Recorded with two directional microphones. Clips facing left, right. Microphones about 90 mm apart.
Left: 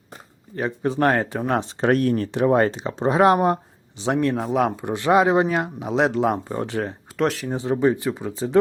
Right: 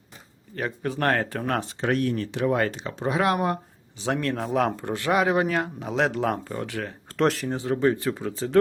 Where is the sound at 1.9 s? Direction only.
45° left (ahead or behind).